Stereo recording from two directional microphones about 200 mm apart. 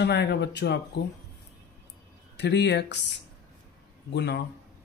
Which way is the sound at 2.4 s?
60° left (ahead or behind).